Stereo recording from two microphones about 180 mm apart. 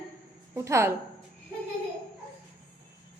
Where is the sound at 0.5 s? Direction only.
15° right (ahead or behind).